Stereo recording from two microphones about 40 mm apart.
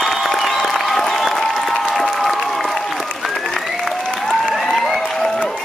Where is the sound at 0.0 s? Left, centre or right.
Centre.